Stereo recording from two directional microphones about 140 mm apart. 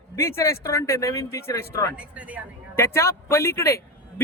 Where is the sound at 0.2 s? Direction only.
20° left (ahead or behind).